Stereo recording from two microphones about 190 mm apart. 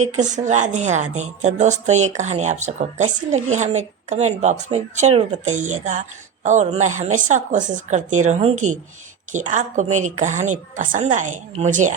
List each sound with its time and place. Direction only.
0.0 s a woman's voice: 40° right (ahead or behind)